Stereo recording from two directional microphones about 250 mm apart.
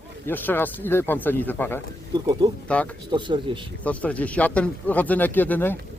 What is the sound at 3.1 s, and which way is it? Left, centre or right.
Speech, centre.